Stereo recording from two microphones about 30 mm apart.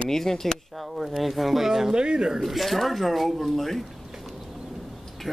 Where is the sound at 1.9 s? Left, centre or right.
Right.